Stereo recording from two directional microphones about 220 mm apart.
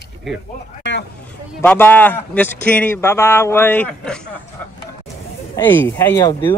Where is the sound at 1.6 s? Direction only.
10° left (ahead or behind).